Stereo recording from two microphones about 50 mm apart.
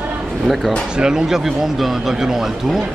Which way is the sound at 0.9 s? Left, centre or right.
Centre.